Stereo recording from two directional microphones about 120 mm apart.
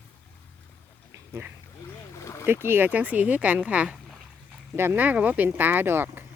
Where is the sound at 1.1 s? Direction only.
25° right (ahead or behind).